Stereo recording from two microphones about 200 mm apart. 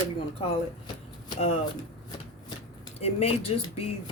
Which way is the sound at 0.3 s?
25° left (ahead or behind).